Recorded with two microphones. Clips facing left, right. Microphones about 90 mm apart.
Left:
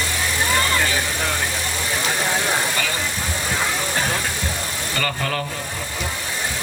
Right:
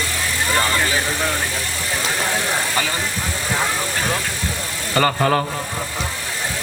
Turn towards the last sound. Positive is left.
turn(degrees=-35)  # may be behind; listen again after turning